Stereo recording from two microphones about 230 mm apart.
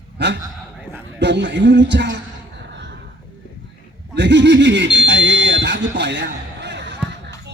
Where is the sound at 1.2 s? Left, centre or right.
Right.